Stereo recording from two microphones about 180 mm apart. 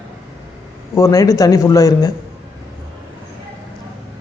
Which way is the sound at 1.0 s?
20° left (ahead or behind).